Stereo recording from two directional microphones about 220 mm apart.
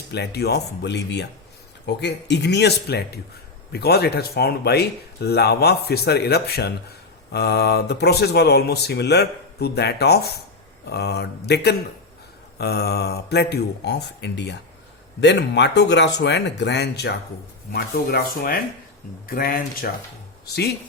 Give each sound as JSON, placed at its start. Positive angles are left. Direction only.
{"t": 0.1, "sound": "speech", "side_deg": 50}